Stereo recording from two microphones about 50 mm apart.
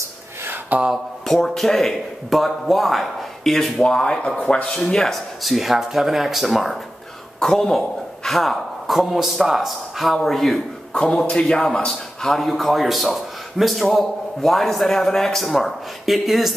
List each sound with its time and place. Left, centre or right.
0.7 s a sound: right
1.2 s a man's voice: centre
3.8 s a man's voice: centre
5.0 s a man's voice: centre
7.3 s a man's voice: centre
10.0 s a man's voice: centre
10.9 s a man's voice: centre
12.4 s a man's voice: centre